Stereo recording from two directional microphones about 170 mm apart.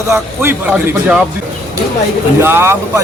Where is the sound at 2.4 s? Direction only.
15° right (ahead or behind).